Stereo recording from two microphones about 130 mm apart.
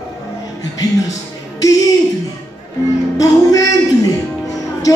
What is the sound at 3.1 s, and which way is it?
Music, 25° left (ahead or behind).